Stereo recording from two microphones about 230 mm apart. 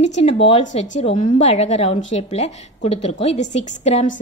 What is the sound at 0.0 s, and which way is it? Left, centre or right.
A woman's voice, left.